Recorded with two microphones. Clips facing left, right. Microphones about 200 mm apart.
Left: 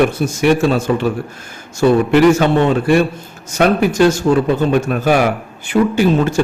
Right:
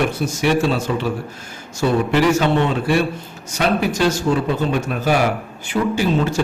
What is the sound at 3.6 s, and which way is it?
A man's voice, 55° left (ahead or behind).